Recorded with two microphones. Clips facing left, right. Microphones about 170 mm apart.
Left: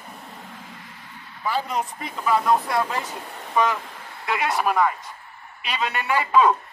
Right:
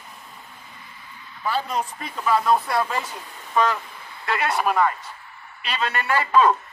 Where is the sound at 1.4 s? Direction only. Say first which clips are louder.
Even; 15° left (ahead or behind).